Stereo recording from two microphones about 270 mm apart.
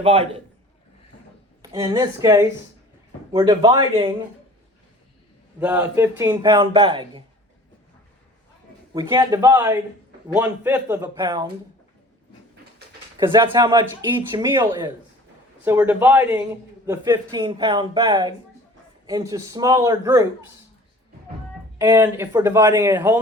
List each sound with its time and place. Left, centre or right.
0.0 s a man's voice: right
1.7 s speech: centre
5.5 s speech: centre
8.9 s speech: centre
13.1 s speech: centre
21.8 s speech: centre